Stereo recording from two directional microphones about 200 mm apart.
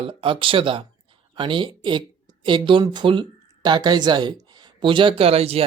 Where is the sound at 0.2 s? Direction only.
25° right (ahead or behind).